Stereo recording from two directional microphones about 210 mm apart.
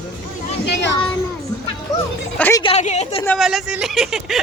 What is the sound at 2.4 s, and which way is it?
Speech, 15° left (ahead or behind).